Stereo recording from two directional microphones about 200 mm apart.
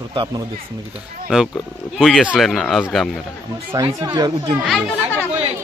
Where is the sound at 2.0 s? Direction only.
Centre (ahead or behind).